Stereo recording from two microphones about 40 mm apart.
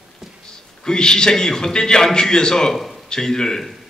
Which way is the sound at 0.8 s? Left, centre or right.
Centre.